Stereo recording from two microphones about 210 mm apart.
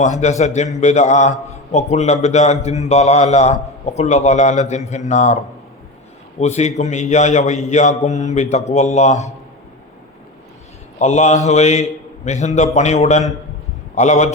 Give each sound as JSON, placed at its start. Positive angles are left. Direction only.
{"t": 0.0, "sound": "a man's voice", "side_deg": 35}
{"t": 6.4, "sound": "a man's voice", "side_deg": 35}
{"t": 11.0, "sound": "a man's voice", "side_deg": 35}